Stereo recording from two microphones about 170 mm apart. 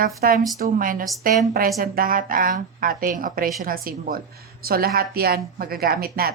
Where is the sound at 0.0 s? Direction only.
55° right (ahead or behind).